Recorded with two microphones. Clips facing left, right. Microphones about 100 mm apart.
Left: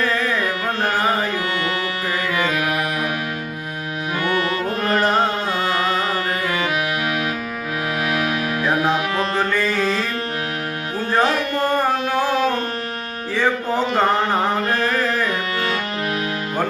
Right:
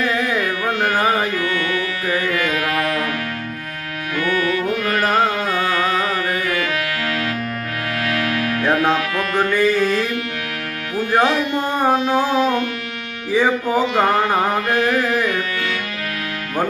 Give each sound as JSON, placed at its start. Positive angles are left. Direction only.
{"t": 0.1, "sound": "carnatic music", "side_deg": -15}
{"t": 0.3, "sound": "carnatic music", "side_deg": 35}
{"t": 2.3, "sound": "music", "side_deg": 20}
{"t": 4.2, "sound": "music", "side_deg": 30}
{"t": 5.5, "sound": "carnatic music", "side_deg": 25}
{"t": 8.0, "sound": "music", "side_deg": 15}
{"t": 10.9, "sound": "music", "side_deg": -15}
{"t": 11.6, "sound": "music", "side_deg": 50}
{"t": 13.3, "sound": "music", "side_deg": -10}